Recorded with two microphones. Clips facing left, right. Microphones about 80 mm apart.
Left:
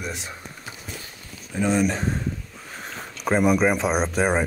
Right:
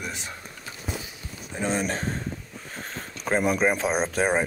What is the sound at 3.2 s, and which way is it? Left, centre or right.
Speech, left.